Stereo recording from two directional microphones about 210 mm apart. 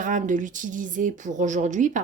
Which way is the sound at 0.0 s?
40° right (ahead or behind).